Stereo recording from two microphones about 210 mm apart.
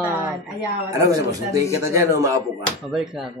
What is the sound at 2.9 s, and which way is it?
Speech, centre (ahead or behind).